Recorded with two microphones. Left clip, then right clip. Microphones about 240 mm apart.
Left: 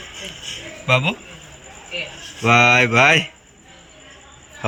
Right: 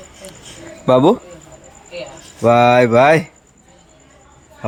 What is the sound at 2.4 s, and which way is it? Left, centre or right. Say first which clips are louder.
Speech: right 3 dB; centre.